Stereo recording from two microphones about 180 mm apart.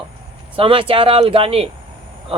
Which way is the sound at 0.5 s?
30° right (ahead or behind).